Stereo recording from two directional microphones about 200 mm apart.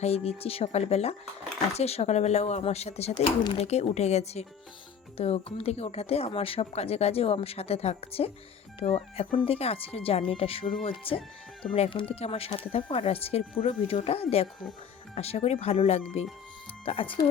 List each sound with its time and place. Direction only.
0.0 s speech: 30° left (ahead or behind)